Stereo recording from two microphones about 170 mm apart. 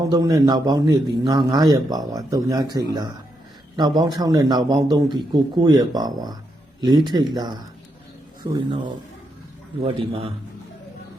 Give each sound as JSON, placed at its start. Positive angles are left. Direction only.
{"t": 0.0, "sound": "a man's voice", "side_deg": -20}
{"t": 8.5, "sound": "a man's voice", "side_deg": -25}